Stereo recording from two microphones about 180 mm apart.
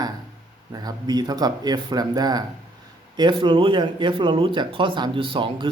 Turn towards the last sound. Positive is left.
turn(degrees=-25)  # may be behind; listen again after turning